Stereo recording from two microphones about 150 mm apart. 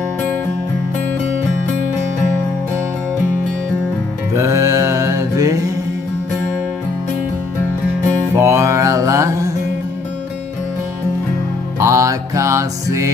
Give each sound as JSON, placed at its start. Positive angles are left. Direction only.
{"t": 4.4, "sound": "mantra", "side_deg": -20}
{"t": 8.4, "sound": "mantra", "side_deg": -20}
{"t": 11.8, "sound": "music", "side_deg": -20}